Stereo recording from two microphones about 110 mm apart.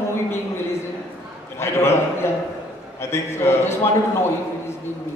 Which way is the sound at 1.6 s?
25° left (ahead or behind).